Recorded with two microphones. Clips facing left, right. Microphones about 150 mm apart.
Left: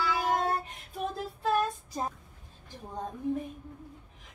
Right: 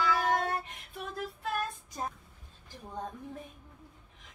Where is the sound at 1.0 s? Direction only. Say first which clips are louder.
Left 4 dB; 35° left (ahead or behind).